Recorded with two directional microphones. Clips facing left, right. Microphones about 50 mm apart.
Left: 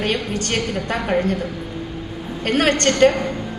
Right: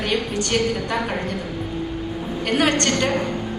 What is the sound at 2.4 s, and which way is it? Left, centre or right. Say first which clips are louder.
Speech: left 2 dB; left.